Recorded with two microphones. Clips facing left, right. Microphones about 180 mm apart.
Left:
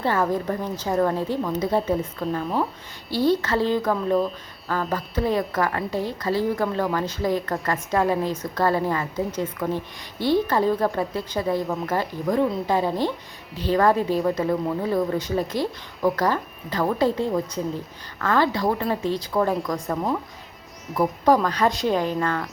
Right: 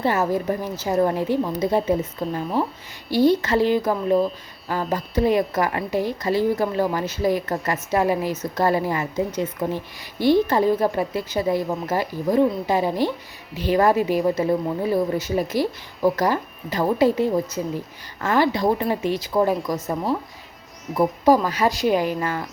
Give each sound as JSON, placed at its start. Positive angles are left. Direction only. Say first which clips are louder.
{"t": 0.0, "sound": "a woman's voice", "louder": "right 1 dB", "side_deg": -10}
{"t": 20.9, "sound": "speech", "louder": "right 2 dB", "side_deg": -5}